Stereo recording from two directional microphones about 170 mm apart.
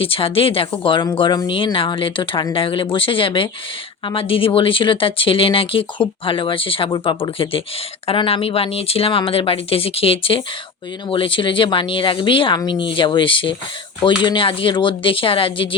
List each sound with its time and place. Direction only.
0.0 s speech: 35° left (ahead or behind)